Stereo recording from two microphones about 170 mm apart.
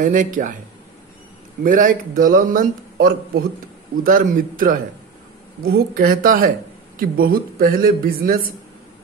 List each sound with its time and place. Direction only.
0.0 s a man's voice: 50° right (ahead or behind)
1.6 s a man's voice: 55° right (ahead or behind)